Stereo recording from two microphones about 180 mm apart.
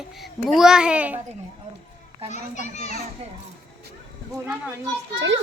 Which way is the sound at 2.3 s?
40° left (ahead or behind).